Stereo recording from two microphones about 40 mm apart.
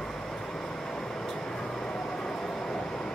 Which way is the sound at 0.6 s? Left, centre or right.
Centre.